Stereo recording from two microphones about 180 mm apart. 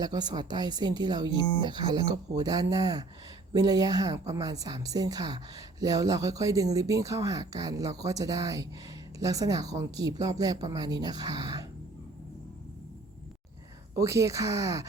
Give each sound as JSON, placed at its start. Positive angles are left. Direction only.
{"t": 0.0, "sound": "a woman's voice", "side_deg": -20}
{"t": 13.9, "sound": "a woman's voice", "side_deg": -15}